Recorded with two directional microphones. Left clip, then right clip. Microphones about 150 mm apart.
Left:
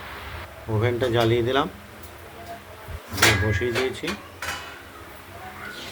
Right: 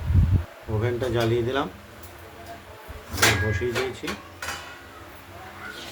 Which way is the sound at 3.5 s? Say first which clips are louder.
Left 2 dB; 30° left (ahead or behind).